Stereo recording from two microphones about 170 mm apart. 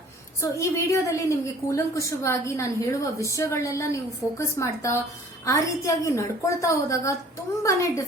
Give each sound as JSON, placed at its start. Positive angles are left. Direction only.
{"t": 0.4, "sound": "a woman's voice", "side_deg": 15}